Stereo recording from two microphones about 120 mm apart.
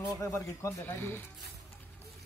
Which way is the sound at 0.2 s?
25° left (ahead or behind).